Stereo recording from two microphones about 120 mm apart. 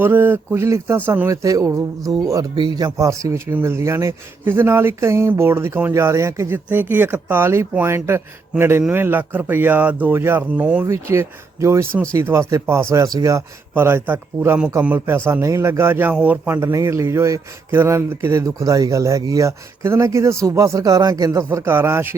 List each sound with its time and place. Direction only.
0.0 s speech: 15° right (ahead or behind)
1.3 s a man's voice: 25° right (ahead or behind); by 10.8 s 10° right (ahead or behind)
11.0 s a man's voice: 20° right (ahead or behind)
16.6 s a man's voice: 25° right (ahead or behind)